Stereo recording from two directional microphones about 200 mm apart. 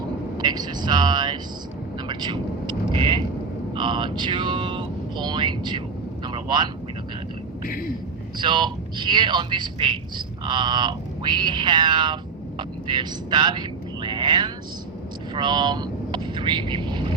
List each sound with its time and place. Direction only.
0.3 s speech: 20° right (ahead or behind)
2.0 s vehicle: 20° right (ahead or behind)
3.8 s a sound: 25° right (ahead or behind)
6.2 s vehicle: 20° right (ahead or behind)
8.4 s a man's voice: 25° right (ahead or behind)